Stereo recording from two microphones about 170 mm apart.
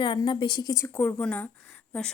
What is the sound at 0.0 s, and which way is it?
Speech, 25° left (ahead or behind).